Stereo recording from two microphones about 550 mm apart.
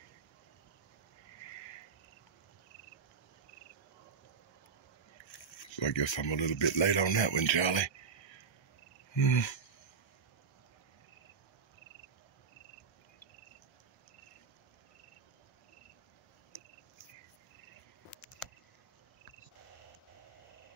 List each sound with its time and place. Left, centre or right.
5.7 s speech: left
9.1 s cricket: left